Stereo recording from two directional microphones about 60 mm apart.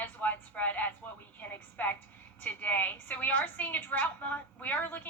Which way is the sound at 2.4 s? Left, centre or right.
Left.